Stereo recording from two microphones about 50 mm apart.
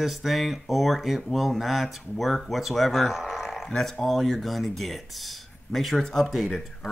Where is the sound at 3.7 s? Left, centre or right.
Centre.